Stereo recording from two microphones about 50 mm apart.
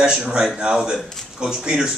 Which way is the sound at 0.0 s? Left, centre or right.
Centre.